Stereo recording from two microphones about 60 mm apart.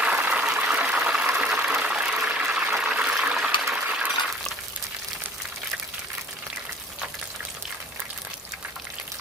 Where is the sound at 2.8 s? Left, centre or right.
Centre.